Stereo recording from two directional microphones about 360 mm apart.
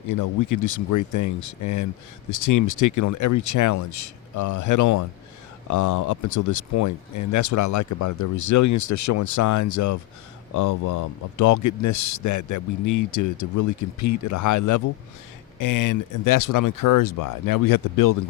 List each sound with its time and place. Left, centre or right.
0.1 s speech: left